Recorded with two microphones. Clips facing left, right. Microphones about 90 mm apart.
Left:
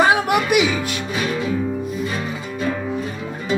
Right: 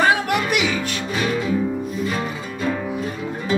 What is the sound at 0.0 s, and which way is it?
Music, 15° left (ahead or behind).